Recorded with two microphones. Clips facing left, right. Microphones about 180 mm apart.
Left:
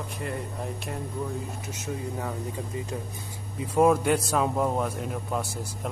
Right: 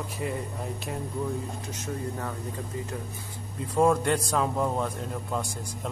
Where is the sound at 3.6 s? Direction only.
5° left (ahead or behind).